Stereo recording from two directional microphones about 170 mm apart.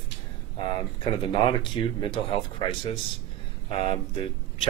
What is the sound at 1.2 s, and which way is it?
Speech, 30° left (ahead or behind).